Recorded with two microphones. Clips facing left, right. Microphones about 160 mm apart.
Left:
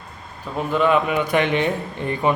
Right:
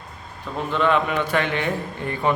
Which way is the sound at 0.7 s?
10° left (ahead or behind).